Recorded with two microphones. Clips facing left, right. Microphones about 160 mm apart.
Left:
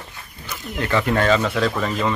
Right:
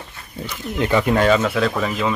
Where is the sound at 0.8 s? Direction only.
15° right (ahead or behind).